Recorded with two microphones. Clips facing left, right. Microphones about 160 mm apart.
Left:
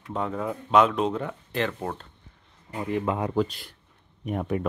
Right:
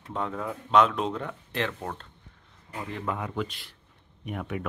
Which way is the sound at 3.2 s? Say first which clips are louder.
Left 7 dB; 35° left (ahead or behind).